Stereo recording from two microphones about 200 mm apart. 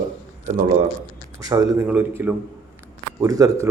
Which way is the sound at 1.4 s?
15° right (ahead or behind).